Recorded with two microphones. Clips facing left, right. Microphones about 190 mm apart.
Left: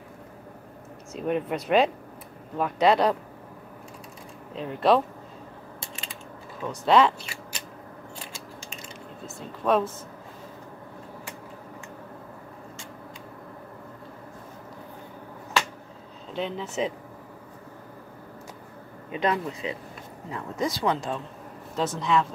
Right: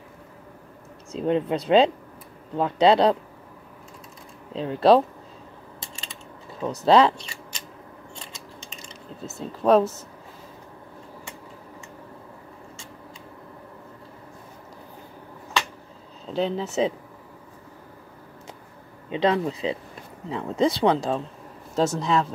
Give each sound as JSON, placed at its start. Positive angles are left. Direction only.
{"t": 1.1, "sound": "speech", "side_deg": -25}
{"t": 4.6, "sound": "speech", "side_deg": -30}
{"t": 6.8, "sound": "speech", "side_deg": -35}
{"t": 7.2, "sound": "scissors", "side_deg": 5}
{"t": 9.2, "sound": "speech", "side_deg": -35}
{"t": 16.3, "sound": "speech", "side_deg": -35}
{"t": 19.0, "sound": "speech", "side_deg": -30}